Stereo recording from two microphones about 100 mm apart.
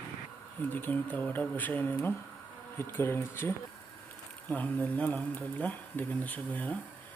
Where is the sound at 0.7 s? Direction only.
20° left (ahead or behind).